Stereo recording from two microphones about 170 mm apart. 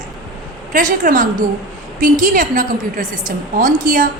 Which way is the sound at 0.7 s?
50° right (ahead or behind).